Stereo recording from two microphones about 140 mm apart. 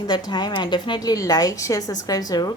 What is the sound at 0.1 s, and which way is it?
A woman's voice, 30° left (ahead or behind).